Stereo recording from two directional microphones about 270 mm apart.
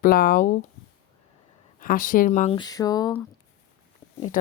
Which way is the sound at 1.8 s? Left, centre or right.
Left.